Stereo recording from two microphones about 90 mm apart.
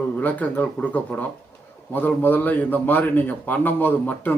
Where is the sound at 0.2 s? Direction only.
20° left (ahead or behind).